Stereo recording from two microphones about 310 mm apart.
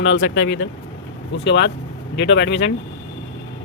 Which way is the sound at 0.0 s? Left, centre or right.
Left.